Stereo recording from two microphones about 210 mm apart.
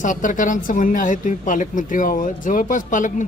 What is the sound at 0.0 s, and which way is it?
Speech, 40° left (ahead or behind).